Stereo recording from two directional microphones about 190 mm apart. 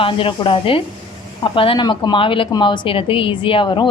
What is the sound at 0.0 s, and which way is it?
A woman's voice, 25° left (ahead or behind).